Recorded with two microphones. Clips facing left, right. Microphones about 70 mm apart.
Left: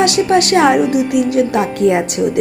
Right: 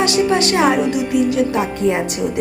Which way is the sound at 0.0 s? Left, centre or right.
Left.